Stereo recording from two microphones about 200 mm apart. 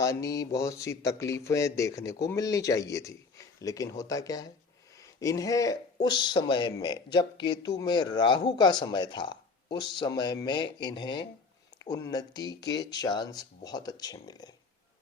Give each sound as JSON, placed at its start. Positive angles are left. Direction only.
{"t": 0.0, "sound": "speech", "side_deg": 15}